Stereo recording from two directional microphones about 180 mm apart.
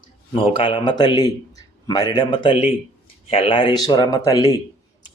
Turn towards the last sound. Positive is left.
turn(degrees=20)  # may be behind; listen again after turning